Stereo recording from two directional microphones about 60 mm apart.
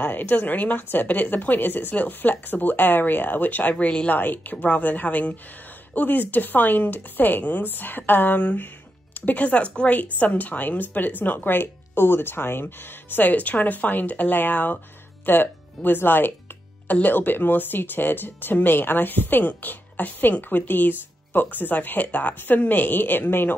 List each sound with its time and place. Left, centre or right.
0.0 s speech: left
3.8 s a woman's voice: centre
4.1 s speech: left